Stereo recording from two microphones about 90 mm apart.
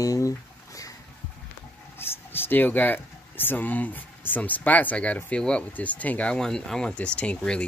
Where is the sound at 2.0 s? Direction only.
25° left (ahead or behind).